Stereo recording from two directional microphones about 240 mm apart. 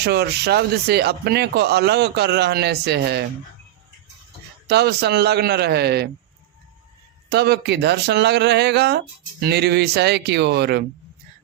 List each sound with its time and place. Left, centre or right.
0.0 s speech: right
4.7 s speech: right
7.3 s speech: right